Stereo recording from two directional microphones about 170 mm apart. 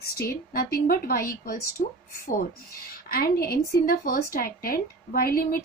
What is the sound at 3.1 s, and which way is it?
A woman's voice, 60° left (ahead or behind).